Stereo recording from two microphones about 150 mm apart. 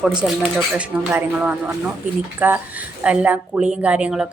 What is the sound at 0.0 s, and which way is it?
A woman's voice, 5° right (ahead or behind).